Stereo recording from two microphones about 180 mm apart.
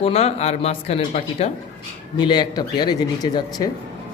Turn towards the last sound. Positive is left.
turn(degrees=20)  # may be behind; listen again after turning